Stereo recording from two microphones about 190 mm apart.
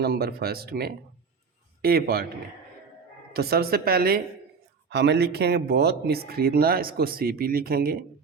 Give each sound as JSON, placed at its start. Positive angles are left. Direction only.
{"t": 0.0, "sound": "a woman's voice", "side_deg": -55}
{"t": 3.3, "sound": "a woman's voice", "side_deg": -55}
{"t": 4.9, "sound": "speech", "side_deg": -65}